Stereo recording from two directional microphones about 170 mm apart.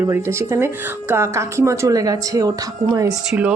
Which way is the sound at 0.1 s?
15° right (ahead or behind).